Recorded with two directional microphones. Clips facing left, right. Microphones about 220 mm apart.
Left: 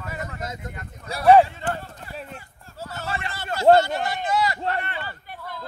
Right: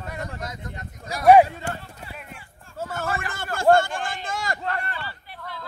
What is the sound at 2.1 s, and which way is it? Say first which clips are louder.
Clip-clop: left 6 dB; 35° left (ahead or behind).